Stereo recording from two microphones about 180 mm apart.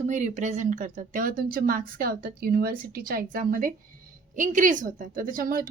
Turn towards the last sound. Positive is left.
turn(degrees=-50)  # may be behind; listen again after turning